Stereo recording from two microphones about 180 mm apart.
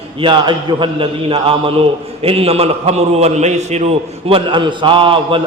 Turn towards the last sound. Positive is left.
turn(degrees=-30)  # may be behind; listen again after turning